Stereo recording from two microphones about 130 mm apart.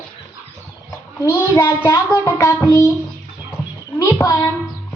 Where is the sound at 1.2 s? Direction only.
15° left (ahead or behind).